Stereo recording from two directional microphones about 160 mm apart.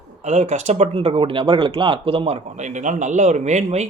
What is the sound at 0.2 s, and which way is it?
Speech, 45° right (ahead or behind).